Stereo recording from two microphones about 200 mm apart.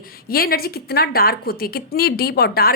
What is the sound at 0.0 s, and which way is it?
A woman's voice, 45° left (ahead or behind).